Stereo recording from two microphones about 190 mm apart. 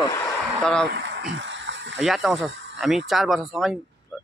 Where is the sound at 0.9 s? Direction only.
65° right (ahead or behind).